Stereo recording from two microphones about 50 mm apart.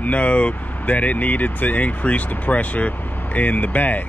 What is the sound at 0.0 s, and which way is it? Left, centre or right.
Speech, left.